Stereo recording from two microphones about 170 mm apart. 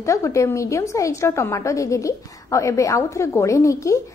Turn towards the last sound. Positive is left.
turn(degrees=20)  # may be behind; listen again after turning